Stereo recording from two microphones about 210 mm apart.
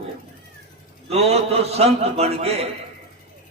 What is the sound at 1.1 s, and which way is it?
A man's voice, 30° right (ahead or behind).